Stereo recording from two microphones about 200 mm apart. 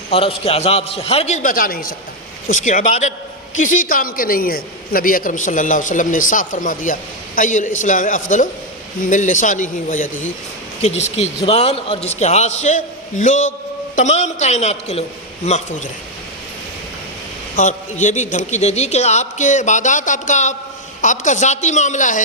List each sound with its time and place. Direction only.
0.1 s a man's voice: 30° left (ahead or behind)
17.5 s a man's voice: 40° left (ahead or behind)